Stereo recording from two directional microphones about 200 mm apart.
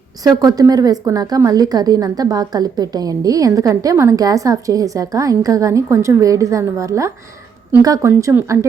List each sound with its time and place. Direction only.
0.3 s a woman's voice: 15° right (ahead or behind)